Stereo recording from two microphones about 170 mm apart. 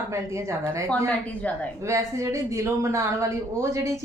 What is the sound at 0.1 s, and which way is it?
Speech, 15° right (ahead or behind).